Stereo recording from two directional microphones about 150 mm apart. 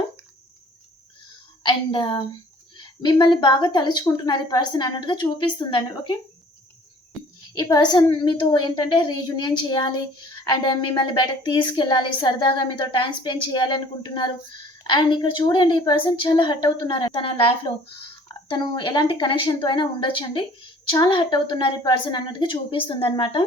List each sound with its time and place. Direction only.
1.6 s a woman's voice: 35° left (ahead or behind)
7.7 s a woman's voice: 30° left (ahead or behind)
18.4 s a woman's voice: 30° left (ahead or behind)